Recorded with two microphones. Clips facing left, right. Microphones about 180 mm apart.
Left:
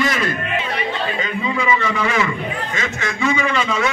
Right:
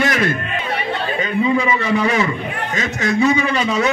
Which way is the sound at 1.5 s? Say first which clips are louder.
Right 3 dB; 35° right (ahead or behind).